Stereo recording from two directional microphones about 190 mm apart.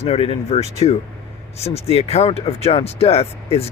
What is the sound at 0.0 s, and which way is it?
Speech, 30° left (ahead or behind).